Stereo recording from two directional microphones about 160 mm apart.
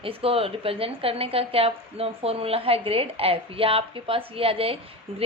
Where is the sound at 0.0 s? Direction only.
35° right (ahead or behind).